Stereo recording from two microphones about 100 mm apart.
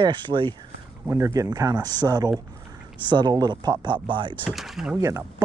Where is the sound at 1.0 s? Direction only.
30° right (ahead or behind); by 4.4 s 55° right (ahead or behind).